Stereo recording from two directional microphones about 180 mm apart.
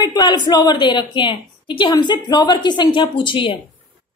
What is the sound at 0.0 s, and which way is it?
A woman's voice, 20° left (ahead or behind).